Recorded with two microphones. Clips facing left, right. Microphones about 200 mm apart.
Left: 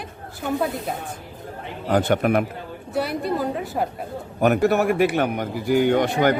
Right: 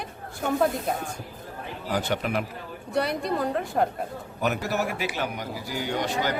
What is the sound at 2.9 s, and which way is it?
Speech, 5° left (ahead or behind).